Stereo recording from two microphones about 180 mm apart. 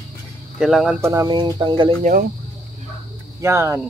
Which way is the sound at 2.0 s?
50° right (ahead or behind).